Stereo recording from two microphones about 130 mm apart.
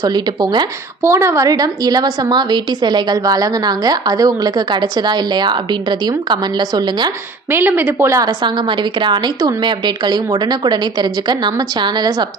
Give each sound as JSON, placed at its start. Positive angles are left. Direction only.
{"t": 0.0, "sound": "a woman's voice", "side_deg": -30}
{"t": 1.0, "sound": "a woman's voice", "side_deg": -20}
{"t": 7.5, "sound": "a woman's voice", "side_deg": -15}